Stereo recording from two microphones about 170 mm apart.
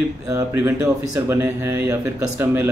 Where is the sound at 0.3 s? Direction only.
20° right (ahead or behind).